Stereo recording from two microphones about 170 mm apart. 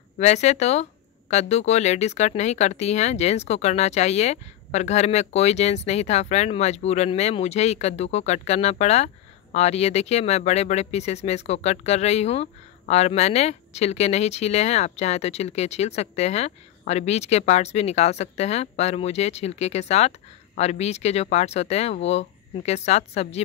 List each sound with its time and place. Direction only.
0.2 s speech: 40° left (ahead or behind)